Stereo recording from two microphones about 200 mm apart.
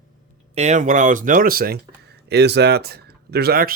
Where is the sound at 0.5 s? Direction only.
35° right (ahead or behind).